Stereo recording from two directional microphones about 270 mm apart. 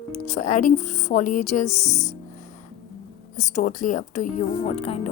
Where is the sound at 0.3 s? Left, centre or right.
Left.